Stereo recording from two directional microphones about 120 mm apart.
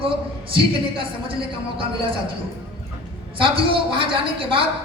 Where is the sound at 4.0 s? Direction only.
45° right (ahead or behind).